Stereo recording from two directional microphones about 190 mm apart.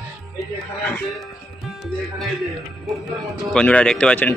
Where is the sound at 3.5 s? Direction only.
5° left (ahead or behind).